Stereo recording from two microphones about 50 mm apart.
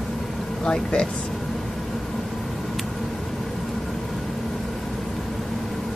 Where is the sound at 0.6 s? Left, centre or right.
Centre.